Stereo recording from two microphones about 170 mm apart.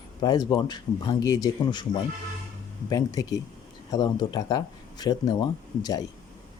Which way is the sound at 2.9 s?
20° left (ahead or behind).